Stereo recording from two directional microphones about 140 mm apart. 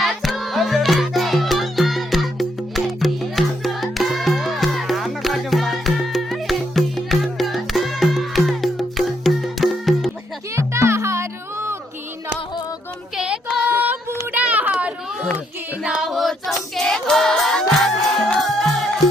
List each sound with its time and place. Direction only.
0.0 s music: centre (ahead or behind)
10.5 s music: 20° right (ahead or behind)
13.1 s child singing: 5° right (ahead or behind)
14.3 s a sound: 10° right (ahead or behind)
15.8 s music: 5° right (ahead or behind)